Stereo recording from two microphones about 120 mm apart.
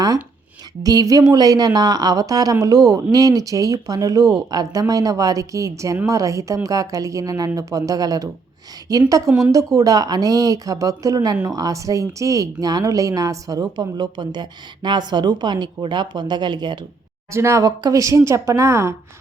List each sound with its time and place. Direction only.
0.8 s a woman's voice: 30° right (ahead or behind)
17.3 s a woman's voice: 25° right (ahead or behind)